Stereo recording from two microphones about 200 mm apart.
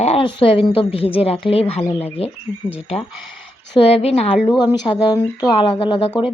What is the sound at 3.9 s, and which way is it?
Speech, 30° left (ahead or behind).